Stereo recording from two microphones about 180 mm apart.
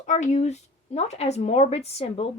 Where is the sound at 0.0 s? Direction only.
40° left (ahead or behind).